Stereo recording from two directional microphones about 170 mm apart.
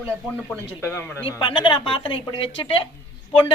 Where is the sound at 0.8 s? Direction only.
15° left (ahead or behind).